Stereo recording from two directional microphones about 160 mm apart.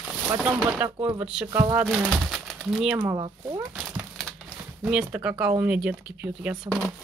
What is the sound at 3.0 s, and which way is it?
Speech, 25° right (ahead or behind).